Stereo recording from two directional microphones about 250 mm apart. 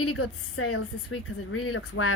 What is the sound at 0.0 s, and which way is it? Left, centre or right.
Speech, left.